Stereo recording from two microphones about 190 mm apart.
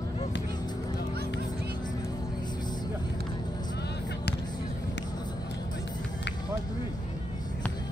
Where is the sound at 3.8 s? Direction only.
60° left (ahead or behind).